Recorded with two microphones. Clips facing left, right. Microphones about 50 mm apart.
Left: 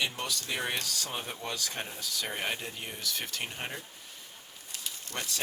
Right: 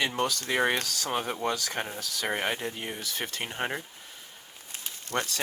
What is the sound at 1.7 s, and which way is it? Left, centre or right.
Speech, right.